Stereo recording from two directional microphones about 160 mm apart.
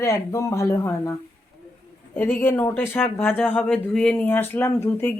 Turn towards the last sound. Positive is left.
turn(degrees=15)  # may be behind; listen again after turning